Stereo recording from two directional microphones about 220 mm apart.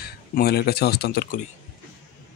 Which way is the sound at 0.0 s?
45° left (ahead or behind).